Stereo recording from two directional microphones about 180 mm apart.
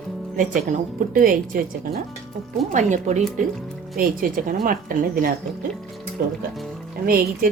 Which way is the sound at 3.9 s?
50° right (ahead or behind).